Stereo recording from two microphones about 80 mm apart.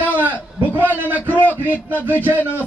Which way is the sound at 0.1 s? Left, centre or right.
Right.